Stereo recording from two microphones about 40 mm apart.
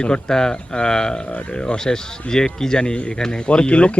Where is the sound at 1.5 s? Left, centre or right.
Left.